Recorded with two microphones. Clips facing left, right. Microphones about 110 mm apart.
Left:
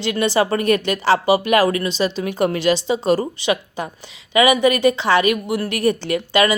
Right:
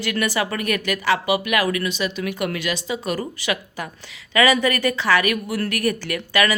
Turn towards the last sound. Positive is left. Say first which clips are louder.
# left 4 dB
turn(degrees=25)  # may be behind; listen again after turning